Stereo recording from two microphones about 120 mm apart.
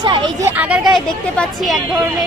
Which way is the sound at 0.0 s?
40° right (ahead or behind).